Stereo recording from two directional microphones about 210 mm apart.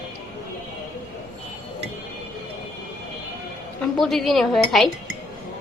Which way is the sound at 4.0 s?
Centre (ahead or behind).